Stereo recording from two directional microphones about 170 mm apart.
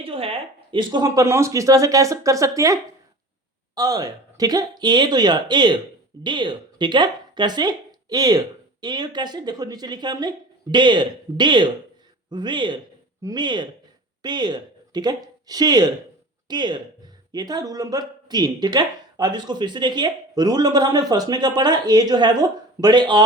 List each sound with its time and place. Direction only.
0.0 s speech: 35° right (ahead or behind); by 2.7 s 20° right (ahead or behind)
3.8 s speech: 20° right (ahead or behind)